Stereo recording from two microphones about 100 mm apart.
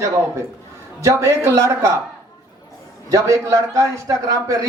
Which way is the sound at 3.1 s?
35° right (ahead or behind).